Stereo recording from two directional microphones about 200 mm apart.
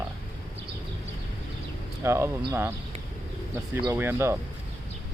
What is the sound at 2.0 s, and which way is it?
Speech, 15° right (ahead or behind).